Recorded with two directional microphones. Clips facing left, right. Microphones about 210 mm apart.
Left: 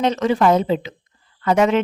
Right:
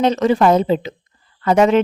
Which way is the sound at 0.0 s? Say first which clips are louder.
Right 3 dB; 35° right (ahead or behind).